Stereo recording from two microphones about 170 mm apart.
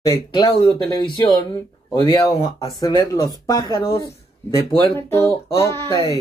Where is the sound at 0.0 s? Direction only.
20° left (ahead or behind).